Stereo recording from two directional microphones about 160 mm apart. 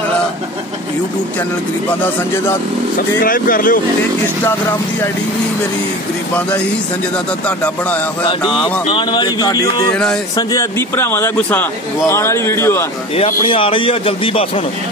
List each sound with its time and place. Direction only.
3.3 s speech: 60° left (ahead or behind)
7.4 s speech: 10° left (ahead or behind)
8.8 s speech: 30° left (ahead or behind)
13.1 s a man's voice: 35° left (ahead or behind)